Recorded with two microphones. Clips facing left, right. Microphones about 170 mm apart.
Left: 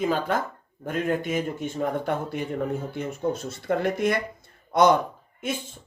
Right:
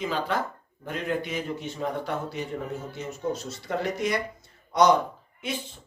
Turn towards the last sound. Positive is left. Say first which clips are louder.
# left 3 dB
turn(degrees=45)  # may be behind; listen again after turning